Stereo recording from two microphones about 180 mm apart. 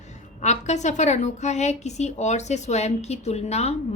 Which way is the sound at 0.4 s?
40° left (ahead or behind).